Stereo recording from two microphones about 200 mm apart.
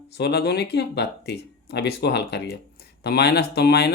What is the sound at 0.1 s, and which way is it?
Speech, 55° left (ahead or behind).